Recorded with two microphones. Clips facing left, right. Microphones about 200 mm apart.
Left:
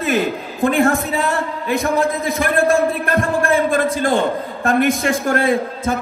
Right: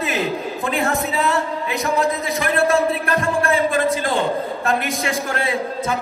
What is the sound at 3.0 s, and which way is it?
A man's voice, 50° left (ahead or behind).